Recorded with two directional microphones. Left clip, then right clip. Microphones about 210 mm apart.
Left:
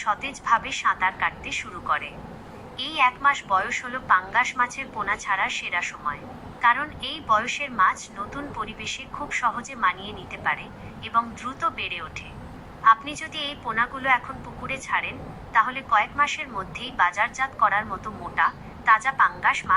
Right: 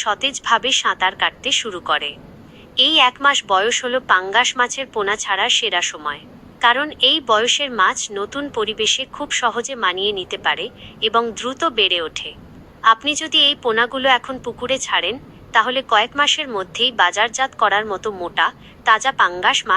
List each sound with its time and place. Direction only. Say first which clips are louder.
0.0 s speech: right 6 dB; 50° right (ahead or behind)
2.7 s speech: right 9 dB; 50° right (ahead or behind)